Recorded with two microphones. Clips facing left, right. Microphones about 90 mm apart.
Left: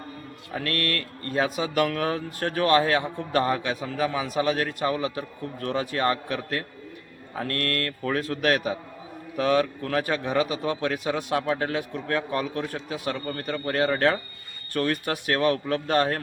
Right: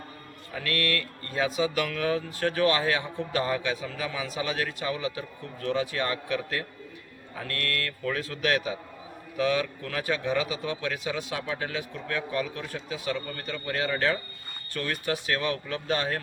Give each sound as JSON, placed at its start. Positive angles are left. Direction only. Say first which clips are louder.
{"t": 0.5, "sound": "a man's voice", "louder": "left 1 dB", "side_deg": 40}